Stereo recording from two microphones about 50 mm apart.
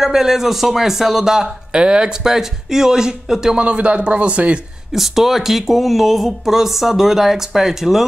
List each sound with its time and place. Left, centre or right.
0.0 s speech: centre
3.5 s speech: right
4.9 s speech: centre